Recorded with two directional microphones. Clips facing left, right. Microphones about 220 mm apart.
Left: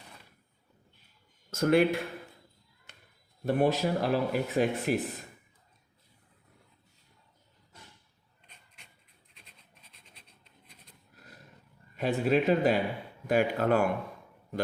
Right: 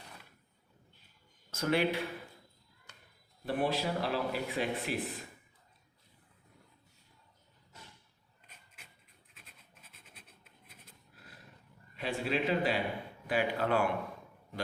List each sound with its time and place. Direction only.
1.5 s speech: 50° left (ahead or behind)
3.4 s speech: 45° left (ahead or behind)
8.4 s a sound: 5° right (ahead or behind)
9.3 s scratch: 5° right (ahead or behind)
11.9 s speech: 45° left (ahead or behind)